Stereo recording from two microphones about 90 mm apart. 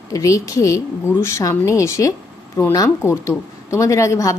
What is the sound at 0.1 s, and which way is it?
A woman's voice, 40° left (ahead or behind).